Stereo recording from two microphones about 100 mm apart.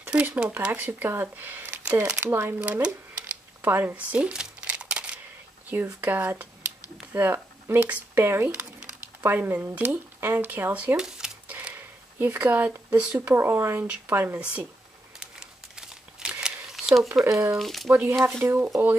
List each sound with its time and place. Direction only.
0.0 s a sound: 15° right (ahead or behind)
0.4 s speech: 15° right (ahead or behind)
2.6 s a sound: 15° right (ahead or behind)
5.9 s speech: 20° right (ahead or behind)
11.5 s a sound: 15° right (ahead or behind)
13.3 s speech: 25° right (ahead or behind)
15.1 s crumpling: 5° right (ahead or behind)
17.6 s speech: centre (ahead or behind)
17.8 s speech: 20° right (ahead or behind)